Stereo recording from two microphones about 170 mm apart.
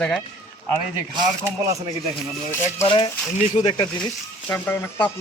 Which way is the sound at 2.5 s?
15° left (ahead or behind).